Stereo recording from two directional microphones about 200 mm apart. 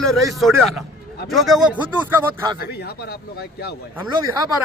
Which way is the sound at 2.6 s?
55° left (ahead or behind).